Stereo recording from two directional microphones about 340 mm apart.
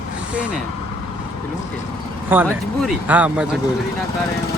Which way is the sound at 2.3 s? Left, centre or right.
Centre.